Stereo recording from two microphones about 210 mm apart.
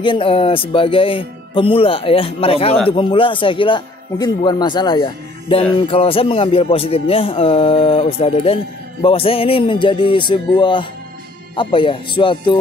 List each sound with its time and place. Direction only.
0.0 s speech: 25° left (ahead or behind)